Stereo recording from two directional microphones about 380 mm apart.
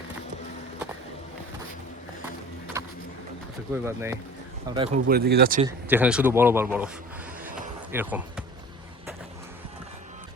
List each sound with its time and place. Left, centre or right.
2.8 s a sound: centre
3.8 s speech: centre; by 5.6 s right
5.6 s a man's voice: centre
7.9 s basketball bounce: centre